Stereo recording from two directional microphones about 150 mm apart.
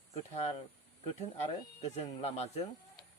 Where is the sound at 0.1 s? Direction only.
45° left (ahead or behind).